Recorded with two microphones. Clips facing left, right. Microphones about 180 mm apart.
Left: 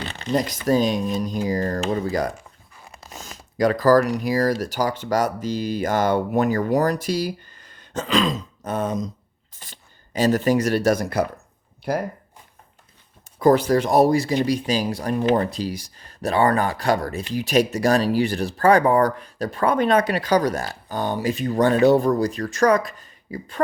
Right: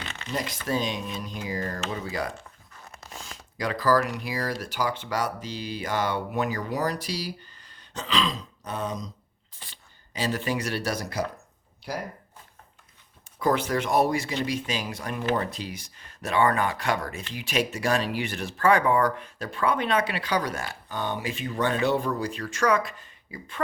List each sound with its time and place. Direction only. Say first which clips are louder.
0.0 s shuffling cards: left 9 dB; 35° left (ahead or behind)
0.7 s speech: left 9 dB; 40° left (ahead or behind)
2.7 s a sound: left 2 dB; 10° left (ahead or behind)
3.1 s speech: left 4 dB; 40° left (ahead or behind)
13.4 s speech: left 8 dB; 35° left (ahead or behind)